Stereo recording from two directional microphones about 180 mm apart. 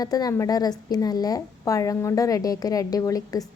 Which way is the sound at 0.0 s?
20° left (ahead or behind).